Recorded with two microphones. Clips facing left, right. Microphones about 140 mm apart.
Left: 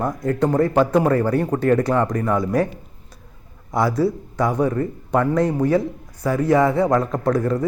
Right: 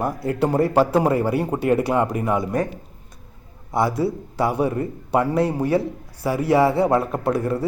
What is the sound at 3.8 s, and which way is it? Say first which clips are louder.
A man's voice: left 2 dB; 25° right (ahead or behind).